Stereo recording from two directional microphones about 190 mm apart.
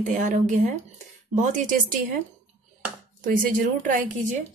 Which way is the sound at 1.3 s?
40° right (ahead or behind).